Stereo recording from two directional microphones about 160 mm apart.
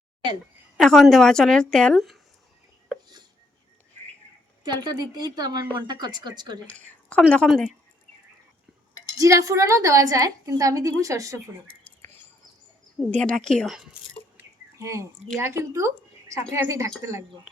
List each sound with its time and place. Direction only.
0.8 s a woman's voice: centre (ahead or behind)
4.6 s a woman's voice: 25° right (ahead or behind)
6.7 s a woman's voice: 10° left (ahead or behind)
9.1 s a woman's voice: 20° right (ahead or behind)
13.1 s a woman's voice: 5° left (ahead or behind)
14.3 s a sound: 20° right (ahead or behind)
15.4 s a woman's voice: 15° right (ahead or behind)